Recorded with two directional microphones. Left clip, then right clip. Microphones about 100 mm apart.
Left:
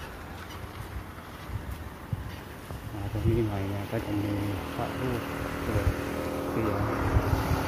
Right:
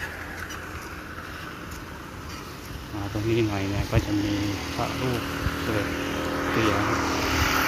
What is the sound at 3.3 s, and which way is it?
Speech, 5° right (ahead or behind).